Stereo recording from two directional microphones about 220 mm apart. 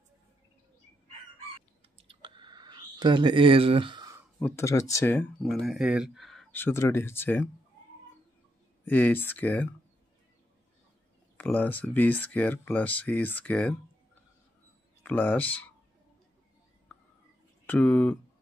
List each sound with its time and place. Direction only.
2.0 s a sound: 20° right (ahead or behind)
4.4 s speech: 10° left (ahead or behind)
8.8 s speech: 10° left (ahead or behind)
11.3 s speech: 5° left (ahead or behind)
15.0 s speech: 5° left (ahead or behind)
17.6 s speech: 5° left (ahead or behind)